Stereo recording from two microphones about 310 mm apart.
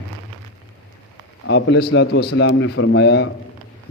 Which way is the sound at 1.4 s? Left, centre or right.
Left.